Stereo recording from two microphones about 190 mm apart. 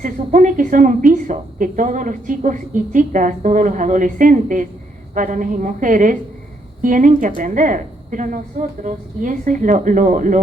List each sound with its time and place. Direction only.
0.0 s a woman's voice: 40° right (ahead or behind)